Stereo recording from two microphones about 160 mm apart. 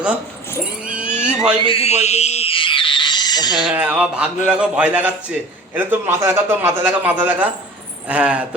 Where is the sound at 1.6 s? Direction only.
35° left (ahead or behind).